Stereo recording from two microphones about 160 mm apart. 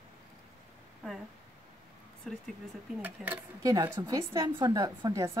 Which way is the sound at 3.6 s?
20° right (ahead or behind).